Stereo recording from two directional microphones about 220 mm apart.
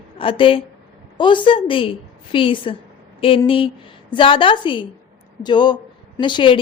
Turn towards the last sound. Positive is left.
turn(degrees=20)  # may be behind; listen again after turning